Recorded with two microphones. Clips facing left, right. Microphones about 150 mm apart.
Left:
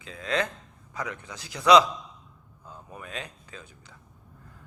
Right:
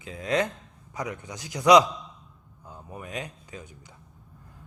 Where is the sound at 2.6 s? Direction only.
20° right (ahead or behind).